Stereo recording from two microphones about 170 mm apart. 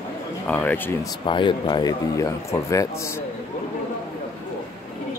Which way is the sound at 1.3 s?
30° left (ahead or behind).